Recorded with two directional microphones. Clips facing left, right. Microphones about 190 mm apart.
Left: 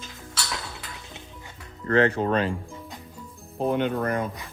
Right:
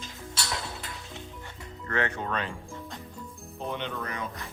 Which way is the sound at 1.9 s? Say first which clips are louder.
Left 9 dB; 35° left (ahead or behind).